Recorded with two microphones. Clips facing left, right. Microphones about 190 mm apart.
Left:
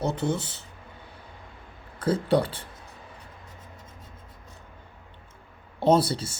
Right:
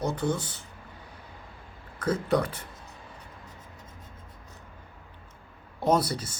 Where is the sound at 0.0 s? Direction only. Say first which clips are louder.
Left 1 dB; 25° left (ahead or behind).